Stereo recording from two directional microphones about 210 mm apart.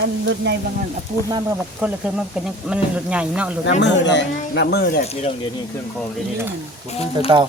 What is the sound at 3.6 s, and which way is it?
Speech, 55° left (ahead or behind).